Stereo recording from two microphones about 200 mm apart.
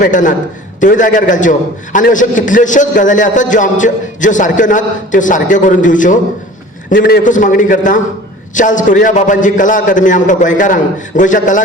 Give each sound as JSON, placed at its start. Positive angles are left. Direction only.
{"t": 0.0, "sound": "a man's voice", "side_deg": 40}